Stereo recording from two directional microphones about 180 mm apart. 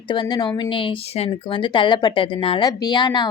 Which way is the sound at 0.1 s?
25° left (ahead or behind).